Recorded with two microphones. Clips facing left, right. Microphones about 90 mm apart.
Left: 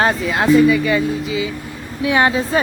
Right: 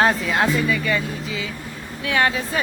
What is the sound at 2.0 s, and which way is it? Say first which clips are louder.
Speech: left 5 dB; 20° left (ahead or behind).